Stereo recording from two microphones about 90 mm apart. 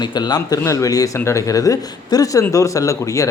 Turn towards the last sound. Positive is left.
turn(degrees=35)  # may be behind; listen again after turning